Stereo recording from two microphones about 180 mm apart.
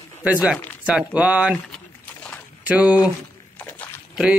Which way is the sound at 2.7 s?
10° right (ahead or behind).